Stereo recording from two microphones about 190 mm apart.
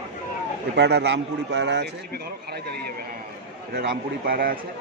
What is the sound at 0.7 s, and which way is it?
A man's voice, 65° right (ahead or behind).